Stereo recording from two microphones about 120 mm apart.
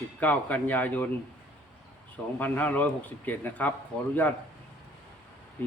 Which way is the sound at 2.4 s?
15° left (ahead or behind).